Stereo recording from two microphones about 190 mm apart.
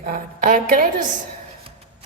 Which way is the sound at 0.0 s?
45° right (ahead or behind).